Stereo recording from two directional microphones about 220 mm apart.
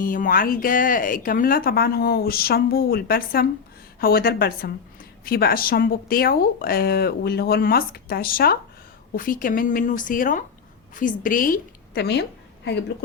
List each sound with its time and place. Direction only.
0.0 s a woman's voice: 40° left (ahead or behind)